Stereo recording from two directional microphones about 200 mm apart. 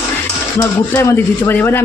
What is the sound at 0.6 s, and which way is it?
Speech, 15° left (ahead or behind).